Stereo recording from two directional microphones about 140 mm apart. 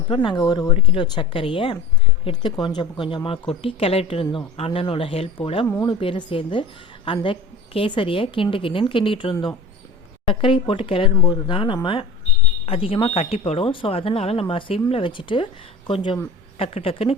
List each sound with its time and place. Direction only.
0.1 s a woman's voice: 35° left (ahead or behind)
16.6 s speech: 40° left (ahead or behind)